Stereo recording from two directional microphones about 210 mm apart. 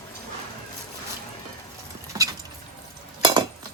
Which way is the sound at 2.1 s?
15° right (ahead or behind).